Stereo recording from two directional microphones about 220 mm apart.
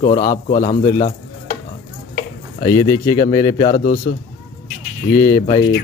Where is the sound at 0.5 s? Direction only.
30° left (ahead or behind).